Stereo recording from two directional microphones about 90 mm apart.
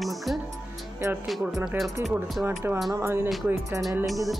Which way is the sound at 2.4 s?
25° right (ahead or behind).